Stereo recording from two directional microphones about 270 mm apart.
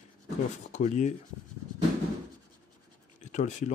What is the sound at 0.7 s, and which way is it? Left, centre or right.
Speech, left.